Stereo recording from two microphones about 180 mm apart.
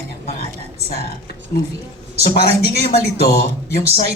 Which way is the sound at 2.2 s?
60° left (ahead or behind).